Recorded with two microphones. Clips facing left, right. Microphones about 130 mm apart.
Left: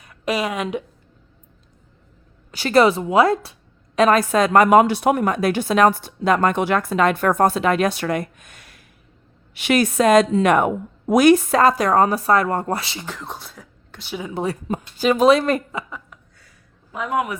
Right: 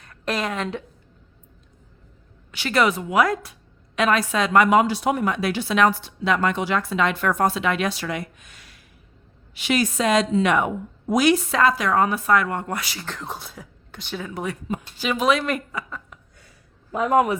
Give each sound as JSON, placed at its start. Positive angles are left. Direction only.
{"t": 0.0, "sound": "a woman's voice", "side_deg": 10}
{"t": 2.5, "sound": "a woman's voice", "side_deg": 40}
{"t": 3.9, "sound": "a woman's voice", "side_deg": 40}
{"t": 13.1, "sound": "speech", "side_deg": 0}
{"t": 14.3, "sound": "speech", "side_deg": 35}
{"t": 16.9, "sound": "speech", "side_deg": -40}